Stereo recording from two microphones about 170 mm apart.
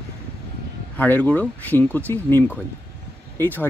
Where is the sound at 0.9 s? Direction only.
10° left (ahead or behind).